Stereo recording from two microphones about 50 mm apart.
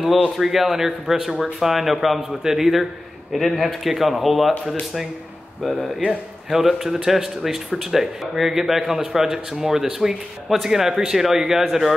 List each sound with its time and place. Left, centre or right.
0.4 s speech: centre